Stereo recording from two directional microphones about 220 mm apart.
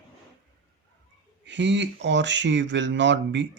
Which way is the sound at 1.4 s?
55° right (ahead or behind).